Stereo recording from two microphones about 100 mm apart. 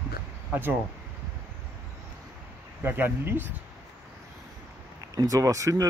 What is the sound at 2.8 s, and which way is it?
Speech, 20° right (ahead or behind).